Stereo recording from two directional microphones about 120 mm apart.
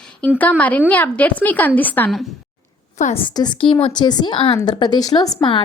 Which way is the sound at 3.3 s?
40° left (ahead or behind).